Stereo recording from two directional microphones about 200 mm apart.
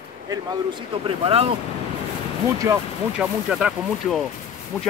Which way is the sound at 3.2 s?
5° right (ahead or behind).